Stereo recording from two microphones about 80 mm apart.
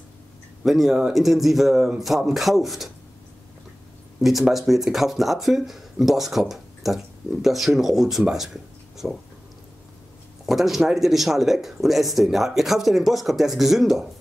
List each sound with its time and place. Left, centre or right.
0.7 s speech: centre
4.2 s speech: centre
10.4 s speech: centre